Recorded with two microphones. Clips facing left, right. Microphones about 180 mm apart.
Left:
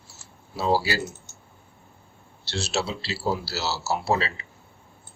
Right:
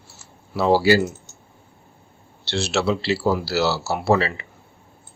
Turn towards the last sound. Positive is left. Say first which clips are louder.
# right 6 dB
turn(degrees=-60)  # may be behind; listen again after turning